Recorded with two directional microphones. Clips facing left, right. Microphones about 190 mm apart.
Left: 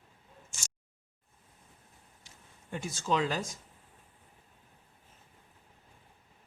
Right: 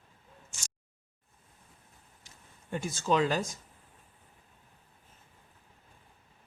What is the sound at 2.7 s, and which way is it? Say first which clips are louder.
Speech: right 3 dB; 50° right (ahead or behind).